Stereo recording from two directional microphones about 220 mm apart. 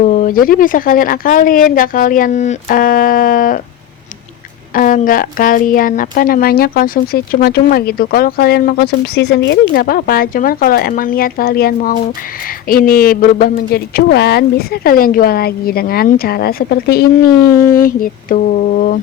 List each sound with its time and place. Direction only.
0.1 s a woman's voice: 40° left (ahead or behind)
4.7 s a woman's voice: 35° left (ahead or behind)